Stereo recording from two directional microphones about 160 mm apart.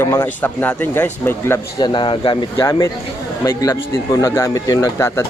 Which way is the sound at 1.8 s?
30° left (ahead or behind).